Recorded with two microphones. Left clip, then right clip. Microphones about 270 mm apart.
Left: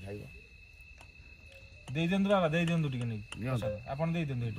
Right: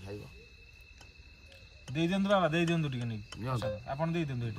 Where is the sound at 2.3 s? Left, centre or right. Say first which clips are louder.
Right 1 dB; centre.